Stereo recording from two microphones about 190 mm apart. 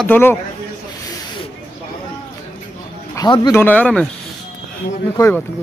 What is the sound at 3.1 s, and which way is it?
Speech, 20° left (ahead or behind).